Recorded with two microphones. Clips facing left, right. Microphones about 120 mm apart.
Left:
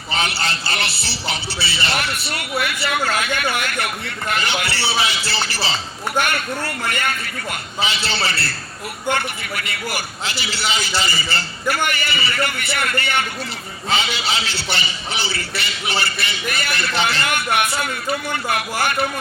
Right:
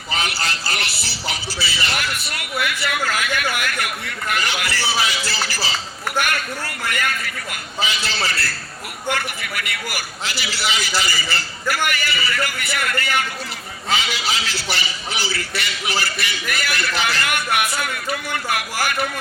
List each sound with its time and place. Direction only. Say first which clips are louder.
0.1 s a man's voice: left 2 dB; 25° left (ahead or behind)